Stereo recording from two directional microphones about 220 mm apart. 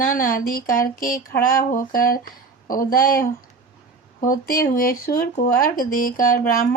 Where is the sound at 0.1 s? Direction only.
40° left (ahead or behind).